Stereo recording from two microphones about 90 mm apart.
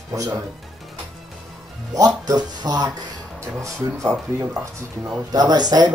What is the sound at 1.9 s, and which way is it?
Speech, 45° right (ahead or behind).